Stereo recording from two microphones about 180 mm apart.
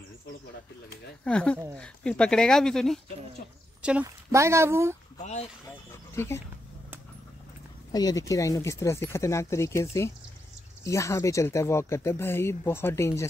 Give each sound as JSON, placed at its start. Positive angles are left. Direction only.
{"t": 1.2, "sound": "speech", "side_deg": 5}
{"t": 4.0, "sound": "speech", "side_deg": -15}
{"t": 5.2, "sound": "speech", "side_deg": 40}
{"t": 6.1, "sound": "speech", "side_deg": 15}
{"t": 7.9, "sound": "speech", "side_deg": 20}